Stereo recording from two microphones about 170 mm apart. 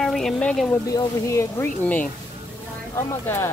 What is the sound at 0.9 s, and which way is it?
Speech, 15° left (ahead or behind).